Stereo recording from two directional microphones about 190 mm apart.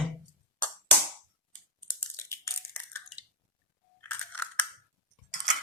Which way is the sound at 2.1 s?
15° left (ahead or behind).